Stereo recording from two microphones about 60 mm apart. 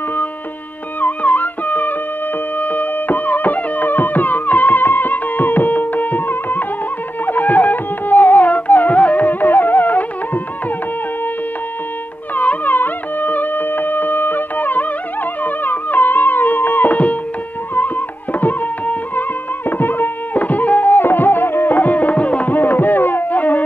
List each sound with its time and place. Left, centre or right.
1.0 s music: left
12.4 s music: left
18.4 s music: left